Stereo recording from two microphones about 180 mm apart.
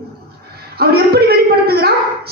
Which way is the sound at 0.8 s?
60° right (ahead or behind).